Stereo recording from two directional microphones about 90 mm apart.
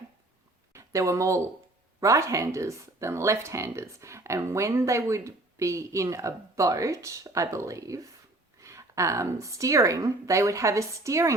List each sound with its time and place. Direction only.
0.7 s speech: 35° right (ahead or behind)